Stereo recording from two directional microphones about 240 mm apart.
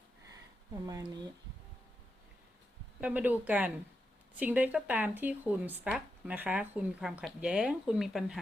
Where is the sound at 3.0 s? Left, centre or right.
Centre.